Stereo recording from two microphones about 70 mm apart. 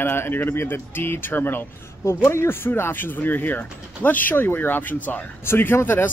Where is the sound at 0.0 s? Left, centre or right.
Left.